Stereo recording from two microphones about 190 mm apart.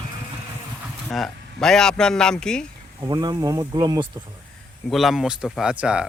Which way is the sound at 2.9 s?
20° right (ahead or behind).